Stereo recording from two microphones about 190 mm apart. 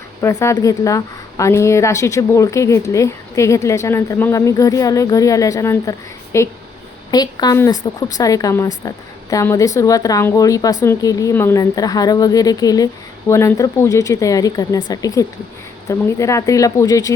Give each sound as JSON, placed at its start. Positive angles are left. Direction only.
{"t": 0.2, "sound": "a woman's voice", "side_deg": 15}